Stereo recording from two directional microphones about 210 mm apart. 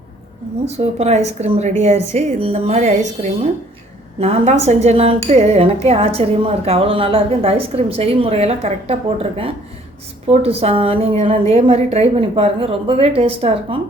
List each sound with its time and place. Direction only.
0.6 s a woman's voice: 30° right (ahead or behind)
10.2 s a woman's voice: 30° right (ahead or behind)